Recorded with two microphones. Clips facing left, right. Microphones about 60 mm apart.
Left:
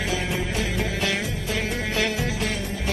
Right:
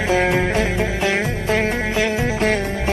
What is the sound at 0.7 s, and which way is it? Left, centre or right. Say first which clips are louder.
Music: right 6 dB; right.